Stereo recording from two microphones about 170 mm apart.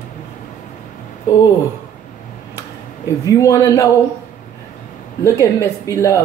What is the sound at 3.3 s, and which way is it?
Speech, 15° left (ahead or behind).